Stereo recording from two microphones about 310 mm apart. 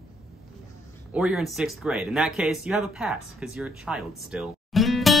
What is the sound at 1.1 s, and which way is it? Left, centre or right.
Speech, centre.